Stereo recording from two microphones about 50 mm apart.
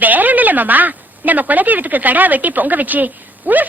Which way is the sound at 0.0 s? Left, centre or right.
Right.